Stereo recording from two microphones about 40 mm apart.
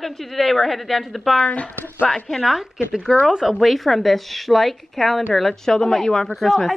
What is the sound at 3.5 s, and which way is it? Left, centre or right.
A woman's voice, centre.